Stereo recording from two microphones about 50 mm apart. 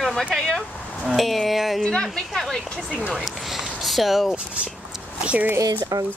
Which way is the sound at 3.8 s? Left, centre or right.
Centre.